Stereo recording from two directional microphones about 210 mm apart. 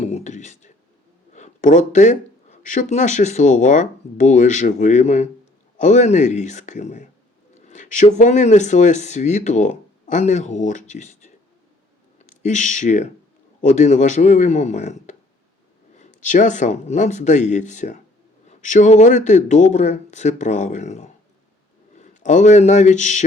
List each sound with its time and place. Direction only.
0.0 s whispering: 35° left (ahead or behind)
1.3 s speech: 35° left (ahead or behind)
12.2 s speech: 35° left (ahead or behind)